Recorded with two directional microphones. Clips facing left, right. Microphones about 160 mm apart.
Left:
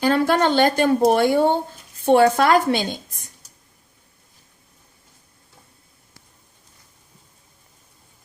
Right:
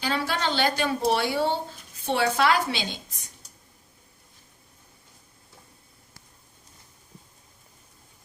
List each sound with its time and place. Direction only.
0.0 s speech: 50° left (ahead or behind)